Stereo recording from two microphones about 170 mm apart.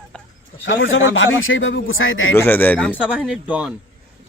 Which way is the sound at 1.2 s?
90° left.